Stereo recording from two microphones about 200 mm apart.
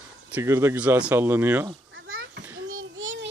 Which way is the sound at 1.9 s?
75° right (ahead or behind).